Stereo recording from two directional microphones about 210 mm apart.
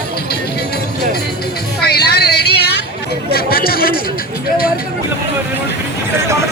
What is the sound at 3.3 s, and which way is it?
Speech, 45° left (ahead or behind).